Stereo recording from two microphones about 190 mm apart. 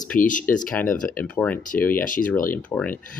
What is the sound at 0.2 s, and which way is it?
Speech, 45° left (ahead or behind).